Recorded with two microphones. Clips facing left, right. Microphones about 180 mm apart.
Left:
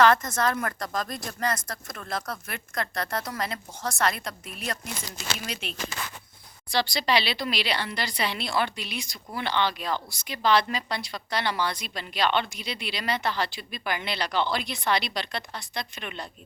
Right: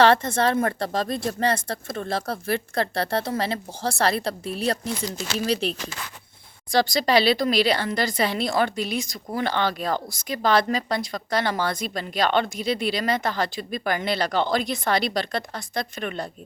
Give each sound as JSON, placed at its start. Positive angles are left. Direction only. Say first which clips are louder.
{"t": 0.0, "sound": "speech", "louder": "right 3 dB", "side_deg": -30}
{"t": 6.7, "sound": "speech", "louder": "right 5 dB", "side_deg": -45}